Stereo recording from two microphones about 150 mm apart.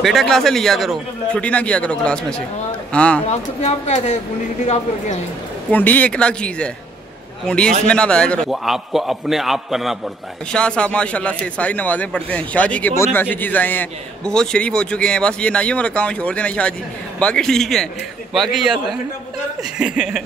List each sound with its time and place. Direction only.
0.0 s a man's voice: centre (ahead or behind)
3.3 s a woman's voice: 50° left (ahead or behind)
5.7 s a man's voice: 10° left (ahead or behind)
19.8 s a man's voice: 5° right (ahead or behind)